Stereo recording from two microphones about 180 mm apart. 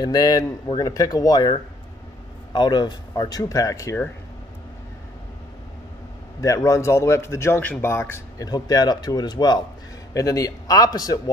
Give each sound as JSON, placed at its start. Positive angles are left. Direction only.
{"t": 0.0, "sound": "speech", "side_deg": 20}
{"t": 6.4, "sound": "a man's voice", "side_deg": 15}